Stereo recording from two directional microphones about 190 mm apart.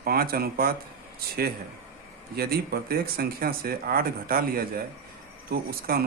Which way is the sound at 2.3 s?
55° right (ahead or behind).